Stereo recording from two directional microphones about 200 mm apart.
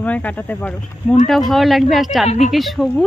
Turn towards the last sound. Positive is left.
turn(degrees=0)  # may be behind; listen again after turning